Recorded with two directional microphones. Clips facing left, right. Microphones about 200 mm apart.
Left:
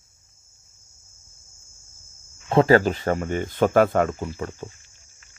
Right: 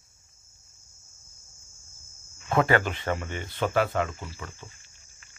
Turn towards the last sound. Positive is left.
turn(degrees=45)  # may be behind; listen again after turning